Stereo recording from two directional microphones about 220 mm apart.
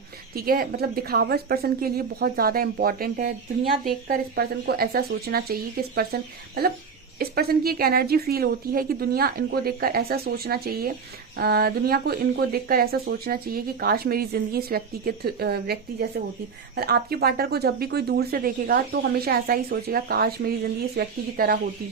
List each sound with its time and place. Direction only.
0.3 s speech: 45° right (ahead or behind)